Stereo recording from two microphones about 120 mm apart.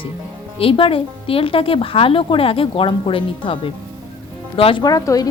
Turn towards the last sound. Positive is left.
turn(degrees=30)  # may be behind; listen again after turning